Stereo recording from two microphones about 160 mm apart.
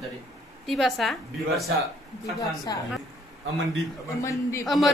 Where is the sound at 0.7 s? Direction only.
Centre (ahead or behind).